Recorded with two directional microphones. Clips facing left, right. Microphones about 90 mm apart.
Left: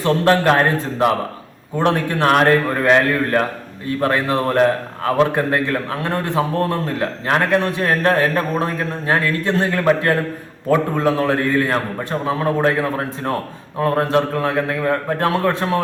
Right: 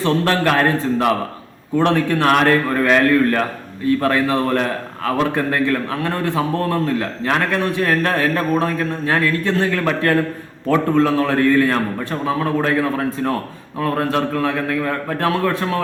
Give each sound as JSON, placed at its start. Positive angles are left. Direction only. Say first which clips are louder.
{"t": 0.0, "sound": "a man's voice", "louder": "left 2 dB", "side_deg": 25}